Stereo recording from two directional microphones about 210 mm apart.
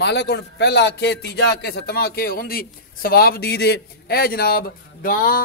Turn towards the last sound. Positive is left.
turn(degrees=45)  # may be behind; listen again after turning